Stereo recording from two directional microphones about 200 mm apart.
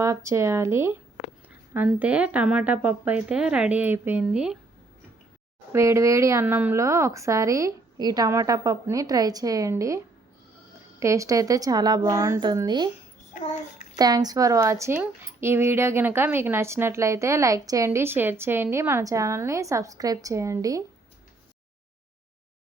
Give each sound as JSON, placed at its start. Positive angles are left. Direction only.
{"t": 0.0, "sound": "speech", "side_deg": -15}
{"t": 5.7, "sound": "speech", "side_deg": -15}
{"t": 11.0, "sound": "speech", "side_deg": -15}
{"t": 13.3, "sound": "child singing", "side_deg": 35}
{"t": 13.9, "sound": "speech", "side_deg": -20}